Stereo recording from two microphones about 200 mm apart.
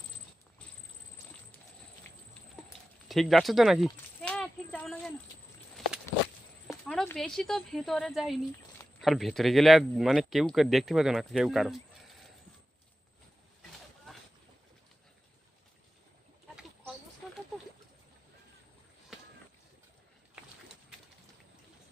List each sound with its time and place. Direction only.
2.0 s a sound: 10° left (ahead or behind)
3.1 s clip-clop: centre (ahead or behind)
6.7 s speech: centre (ahead or behind)
14.1 s boat: centre (ahead or behind)